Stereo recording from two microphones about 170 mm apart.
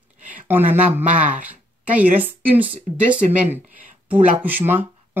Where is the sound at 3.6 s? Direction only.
50° right (ahead or behind).